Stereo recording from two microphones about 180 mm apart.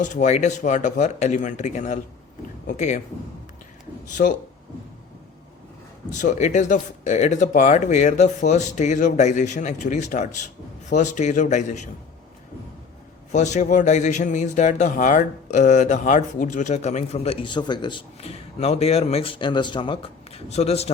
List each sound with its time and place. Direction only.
0.0 s speech: 40° left (ahead or behind)
4.2 s speech: 50° left (ahead or behind)
6.1 s speech: 45° left (ahead or behind)
13.3 s speech: 40° left (ahead or behind)